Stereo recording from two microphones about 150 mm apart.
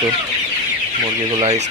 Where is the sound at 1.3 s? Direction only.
45° right (ahead or behind).